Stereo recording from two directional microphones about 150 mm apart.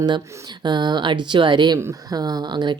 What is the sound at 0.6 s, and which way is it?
Speech, 30° right (ahead or behind).